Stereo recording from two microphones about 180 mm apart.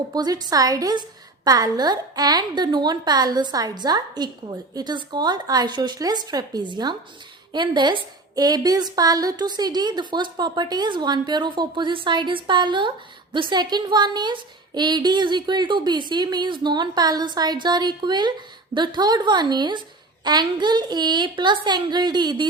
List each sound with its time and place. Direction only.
0.1 s a woman's voice: 20° right (ahead or behind)